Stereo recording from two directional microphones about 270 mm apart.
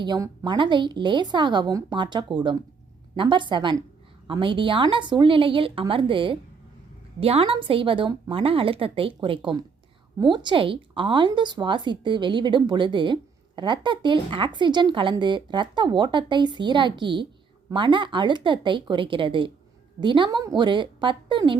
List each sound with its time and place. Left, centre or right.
0.0 s a woman's voice: centre